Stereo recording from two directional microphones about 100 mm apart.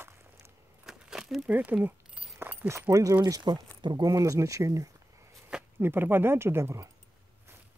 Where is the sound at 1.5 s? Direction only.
15° right (ahead or behind).